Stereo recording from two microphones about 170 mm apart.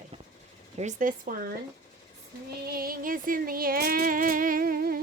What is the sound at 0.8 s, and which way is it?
Speech, 50° right (ahead or behind).